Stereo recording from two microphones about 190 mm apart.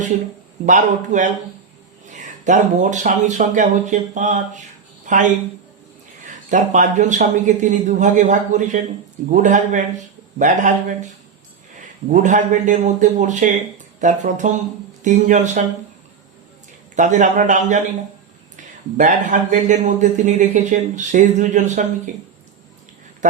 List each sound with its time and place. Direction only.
0.6 s speech: 40° right (ahead or behind)
6.2 s speech: 40° right (ahead or behind)
12.0 s speech: 40° right (ahead or behind)
16.9 s speech: 40° right (ahead or behind)
23.2 s a man's voice: 40° right (ahead or behind)